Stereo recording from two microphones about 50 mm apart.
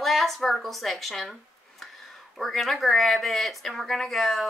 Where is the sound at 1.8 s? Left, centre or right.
Centre.